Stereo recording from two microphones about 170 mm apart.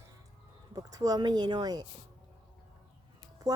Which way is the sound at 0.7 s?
20° right (ahead or behind).